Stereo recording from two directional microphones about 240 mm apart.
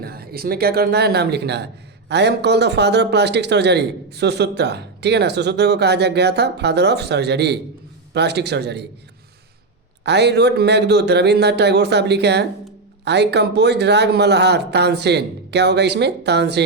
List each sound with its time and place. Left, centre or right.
0.0 s speech: right
10.0 s speech: right